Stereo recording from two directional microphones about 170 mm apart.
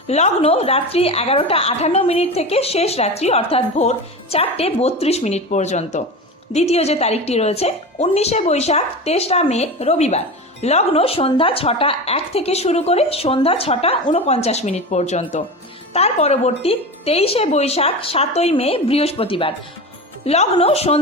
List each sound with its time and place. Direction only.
0.1 s a woman's voice: 40° left (ahead or behind)